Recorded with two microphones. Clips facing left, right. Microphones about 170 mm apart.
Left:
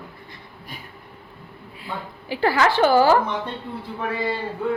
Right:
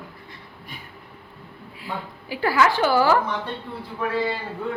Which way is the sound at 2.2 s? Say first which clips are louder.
Even; 25° left (ahead or behind).